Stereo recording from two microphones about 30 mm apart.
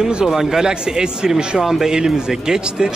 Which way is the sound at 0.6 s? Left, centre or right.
Right.